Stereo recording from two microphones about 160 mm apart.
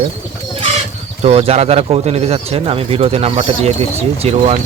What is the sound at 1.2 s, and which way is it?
Speech, 35° right (ahead or behind).